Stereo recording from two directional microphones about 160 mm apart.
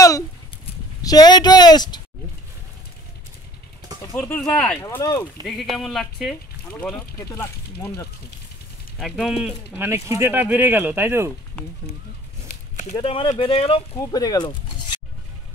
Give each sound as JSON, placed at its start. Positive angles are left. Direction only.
{"t": 1.0, "sound": "speech", "side_deg": 25}
{"t": 4.0, "sound": "speech", "side_deg": 15}
{"t": 4.8, "sound": "speech", "side_deg": 20}
{"t": 5.4, "sound": "speech", "side_deg": 0}
{"t": 7.2, "sound": "speech", "side_deg": 20}
{"t": 8.9, "sound": "speech", "side_deg": 0}
{"t": 9.8, "sound": "speech", "side_deg": -15}
{"t": 12.9, "sound": "speech", "side_deg": 35}
{"t": 13.9, "sound": "speech", "side_deg": 25}